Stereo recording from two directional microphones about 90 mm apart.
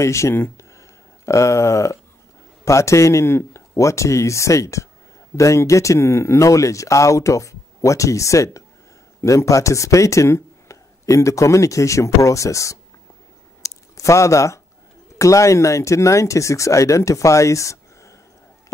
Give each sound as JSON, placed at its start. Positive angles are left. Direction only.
{"t": 0.0, "sound": "speech", "side_deg": 35}
{"t": 13.6, "sound": "a sound", "side_deg": 35}
{"t": 15.1, "sound": "speech", "side_deg": 35}